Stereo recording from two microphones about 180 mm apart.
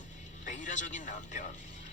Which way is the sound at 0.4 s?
45° left (ahead or behind).